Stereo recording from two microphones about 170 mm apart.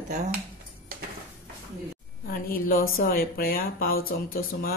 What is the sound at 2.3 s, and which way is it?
Speech, 60° left (ahead or behind).